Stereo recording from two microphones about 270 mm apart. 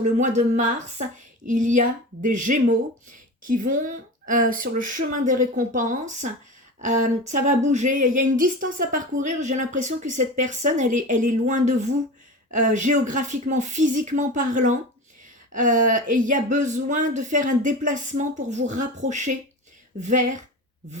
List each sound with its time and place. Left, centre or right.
0.0 s speech: right